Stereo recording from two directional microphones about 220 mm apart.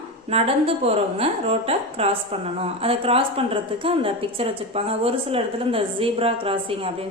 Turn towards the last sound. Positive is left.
turn(degrees=-25)  # may be behind; listen again after turning